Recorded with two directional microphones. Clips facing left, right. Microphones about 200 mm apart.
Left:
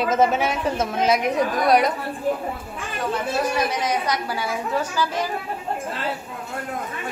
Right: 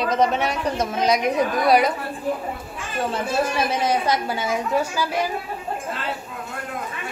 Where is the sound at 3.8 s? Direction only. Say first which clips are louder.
Right 3 dB; 25° right (ahead or behind); by 5.3 s 10° right (ahead or behind).